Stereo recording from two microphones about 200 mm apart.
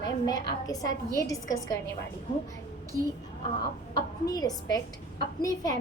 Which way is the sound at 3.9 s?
20° left (ahead or behind).